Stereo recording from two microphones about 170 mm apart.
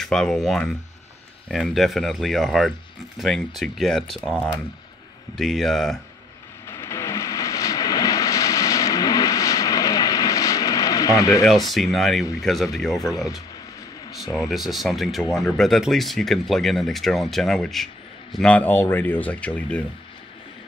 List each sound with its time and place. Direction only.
0.0 s speech: 5° left (ahead or behind)
6.7 s vehicle: 15° left (ahead or behind)
11.4 s speech: centre (ahead or behind)
13.1 s speech: 20° left (ahead or behind)
14.5 s speech: centre (ahead or behind)